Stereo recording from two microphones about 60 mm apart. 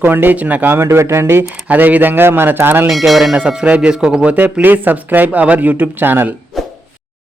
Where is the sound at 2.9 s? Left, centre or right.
Centre.